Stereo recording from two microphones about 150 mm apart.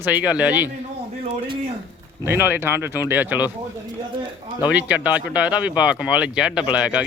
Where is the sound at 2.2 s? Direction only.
15° right (ahead or behind).